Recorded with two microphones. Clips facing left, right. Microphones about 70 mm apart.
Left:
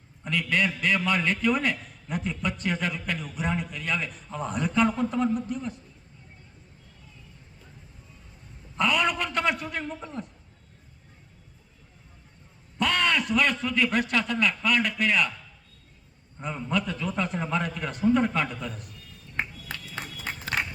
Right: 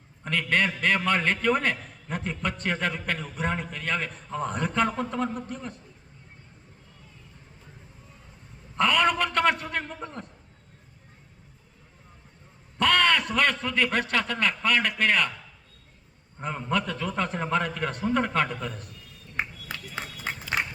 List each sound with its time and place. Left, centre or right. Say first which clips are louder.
0.3 s a man's voice: right 1 dB; right
8.7 s a man's voice: right 2 dB; right
12.8 s a man's voice: right 3 dB; right
16.4 s a man's voice: right 1 dB; right